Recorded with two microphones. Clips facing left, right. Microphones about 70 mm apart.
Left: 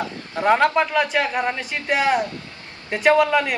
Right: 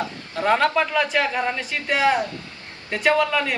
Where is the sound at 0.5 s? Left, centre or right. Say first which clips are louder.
Left 2 dB; centre.